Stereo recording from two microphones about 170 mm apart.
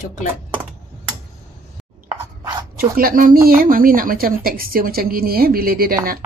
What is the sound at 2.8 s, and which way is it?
A woman's voice, 60° right (ahead or behind).